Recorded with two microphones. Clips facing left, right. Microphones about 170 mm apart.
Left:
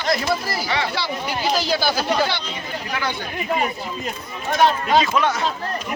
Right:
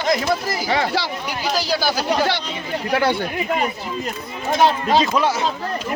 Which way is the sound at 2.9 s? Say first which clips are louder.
Right 8 dB; 60° right (ahead or behind).